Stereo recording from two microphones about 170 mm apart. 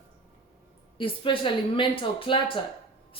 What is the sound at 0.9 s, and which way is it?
A woman's voice, 30° left (ahead or behind).